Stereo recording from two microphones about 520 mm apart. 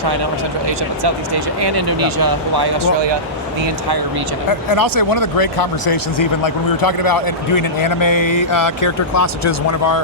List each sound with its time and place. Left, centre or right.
1.6 s speech: right
4.7 s speech: left